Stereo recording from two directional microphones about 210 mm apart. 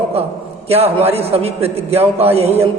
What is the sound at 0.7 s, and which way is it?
A man's voice, 30° right (ahead or behind).